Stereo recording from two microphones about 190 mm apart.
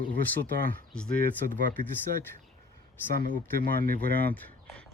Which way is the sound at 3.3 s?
50° left (ahead or behind).